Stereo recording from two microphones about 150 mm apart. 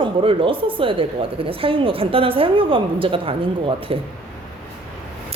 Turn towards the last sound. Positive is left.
turn(degrees=-40)  # may be behind; listen again after turning